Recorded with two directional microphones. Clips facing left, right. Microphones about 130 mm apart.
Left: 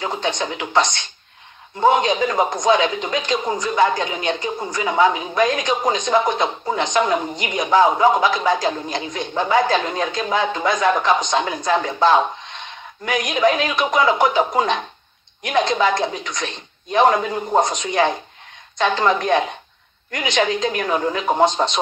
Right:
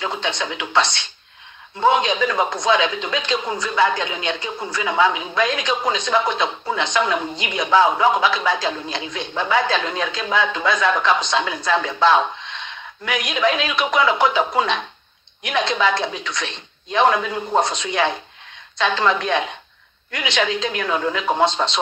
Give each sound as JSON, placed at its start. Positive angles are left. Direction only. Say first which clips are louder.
{"t": 0.2, "sound": "a woman's voice", "louder": "left 2 dB", "side_deg": 40}
{"t": 2.3, "sound": "speech", "louder": "left 2 dB", "side_deg": 15}
{"t": 2.6, "sound": "a woman's voice", "louder": "left 3 dB", "side_deg": 40}
{"t": 17.4, "sound": "speech", "louder": "left 2 dB", "side_deg": 15}
{"t": 17.6, "sound": "a woman's voice", "louder": "left 2 dB", "side_deg": 40}
{"t": 21.5, "sound": "speech", "louder": "left 2 dB", "side_deg": 15}